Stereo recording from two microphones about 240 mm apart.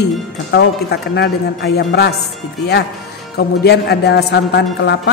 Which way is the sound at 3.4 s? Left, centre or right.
Left.